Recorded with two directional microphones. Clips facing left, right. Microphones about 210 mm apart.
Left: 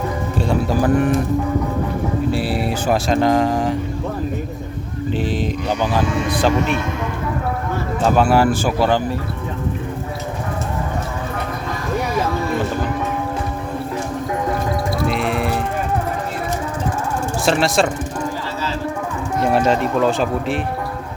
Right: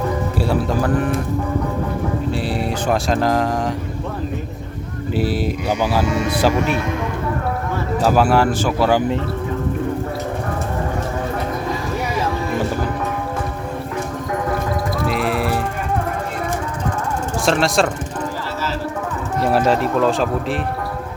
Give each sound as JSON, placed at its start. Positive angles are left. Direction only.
{"t": 0.3, "sound": "speech", "side_deg": -5}
{"t": 2.3, "sound": "speech", "side_deg": 5}
{"t": 5.1, "sound": "speech", "side_deg": -10}
{"t": 8.0, "sound": "speech", "side_deg": -5}
{"t": 8.9, "sound": "speech", "side_deg": -15}
{"t": 15.0, "sound": "music", "side_deg": 0}
{"t": 17.4, "sound": "speech", "side_deg": 0}
{"t": 19.4, "sound": "speech", "side_deg": 0}